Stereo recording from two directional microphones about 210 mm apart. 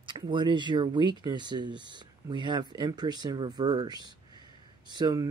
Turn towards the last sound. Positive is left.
turn(degrees=-20)  # may be behind; listen again after turning